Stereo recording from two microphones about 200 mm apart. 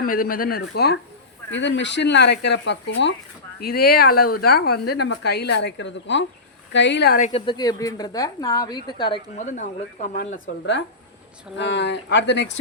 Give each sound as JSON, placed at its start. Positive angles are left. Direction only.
{"t": 0.0, "sound": "speech", "side_deg": 45}
{"t": 1.5, "sound": "speech", "side_deg": 65}
{"t": 3.6, "sound": "speech", "side_deg": 50}
{"t": 7.2, "sound": "a woman's voice", "side_deg": 25}
{"t": 9.4, "sound": "a woman's voice", "side_deg": 35}
{"t": 11.5, "sound": "speech", "side_deg": 60}